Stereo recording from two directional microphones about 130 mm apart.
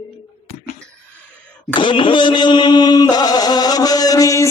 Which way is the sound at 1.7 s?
40° left (ahead or behind).